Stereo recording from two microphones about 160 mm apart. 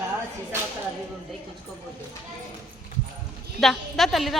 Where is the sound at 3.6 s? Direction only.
Centre (ahead or behind).